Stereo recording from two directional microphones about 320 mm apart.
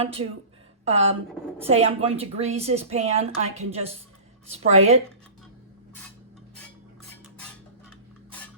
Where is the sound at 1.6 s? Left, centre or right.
Centre.